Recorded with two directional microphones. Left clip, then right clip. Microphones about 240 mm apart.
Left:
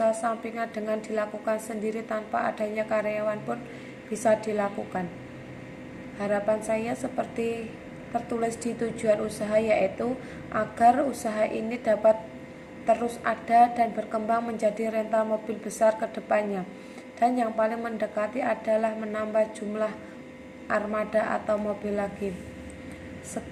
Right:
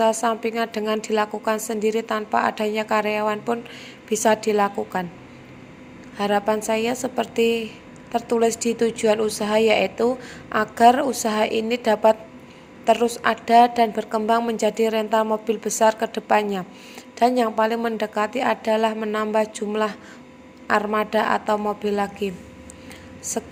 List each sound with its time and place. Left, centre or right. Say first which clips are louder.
0.0 s a woman's voice: right 6 dB; right
6.2 s a woman's voice: right 5 dB; right